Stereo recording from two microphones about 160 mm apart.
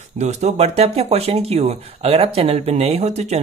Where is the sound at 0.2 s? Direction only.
45° right (ahead or behind).